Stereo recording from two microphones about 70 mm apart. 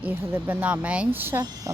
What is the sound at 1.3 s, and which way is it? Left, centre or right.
Speech, right.